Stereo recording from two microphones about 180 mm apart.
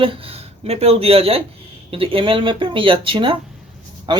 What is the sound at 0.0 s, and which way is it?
Speech, 30° right (ahead or behind).